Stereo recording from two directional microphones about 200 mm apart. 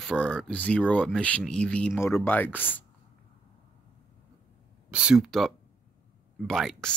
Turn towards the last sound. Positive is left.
turn(degrees=0)  # may be behind; listen again after turning